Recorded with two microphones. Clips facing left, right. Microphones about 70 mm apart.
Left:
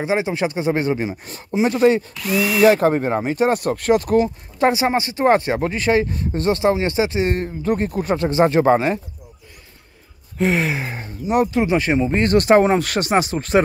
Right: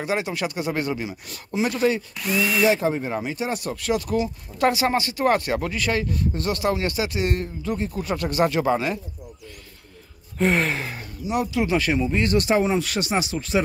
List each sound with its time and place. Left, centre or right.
0.0 s speech: left
1.8 s speech: left
2.1 s speech: centre
2.6 s speech: left
4.6 s speech: left
8.1 s speech: left
10.3 s a sound: centre
10.8 s speech: left
11.2 s speech: left
11.6 s speech: left
12.1 s speech: left